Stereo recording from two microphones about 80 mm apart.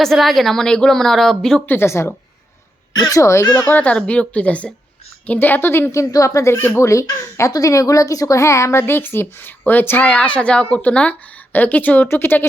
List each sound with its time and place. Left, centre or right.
0.0 s a woman's voice: centre
1.6 s speech: left
3.4 s speech: left
3.7 s a woman's voice: centre